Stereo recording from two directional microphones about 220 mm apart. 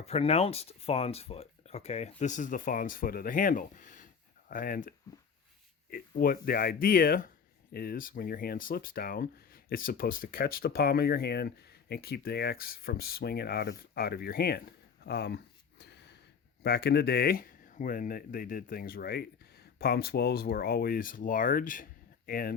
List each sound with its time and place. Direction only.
0.0 s speech: 30° left (ahead or behind); by 15.4 s 50° left (ahead or behind)
16.6 s speech: 50° left (ahead or behind)